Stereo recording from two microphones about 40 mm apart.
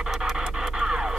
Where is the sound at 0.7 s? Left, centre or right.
Centre.